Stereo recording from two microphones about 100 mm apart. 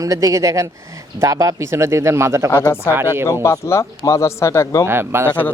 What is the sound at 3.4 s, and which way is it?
A man's voice, 25° left (ahead or behind).